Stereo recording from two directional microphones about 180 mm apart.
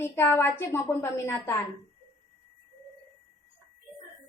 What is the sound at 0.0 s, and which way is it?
A woman's voice, 15° left (ahead or behind).